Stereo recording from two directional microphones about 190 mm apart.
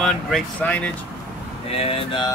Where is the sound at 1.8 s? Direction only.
30° left (ahead or behind).